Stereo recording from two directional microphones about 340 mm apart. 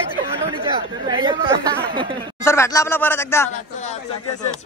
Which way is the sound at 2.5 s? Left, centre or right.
Centre.